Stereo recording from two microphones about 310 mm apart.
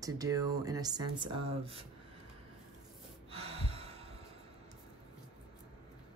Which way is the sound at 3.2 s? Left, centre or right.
Centre.